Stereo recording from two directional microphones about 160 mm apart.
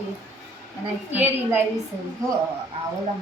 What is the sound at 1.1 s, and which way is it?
Speech, 10° right (ahead or behind).